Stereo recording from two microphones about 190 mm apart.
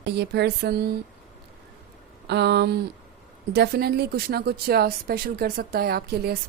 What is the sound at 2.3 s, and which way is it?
Speech, 60° right (ahead or behind).